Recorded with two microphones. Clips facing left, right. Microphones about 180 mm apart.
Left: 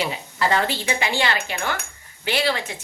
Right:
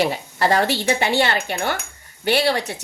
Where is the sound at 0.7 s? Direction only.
70° right (ahead or behind).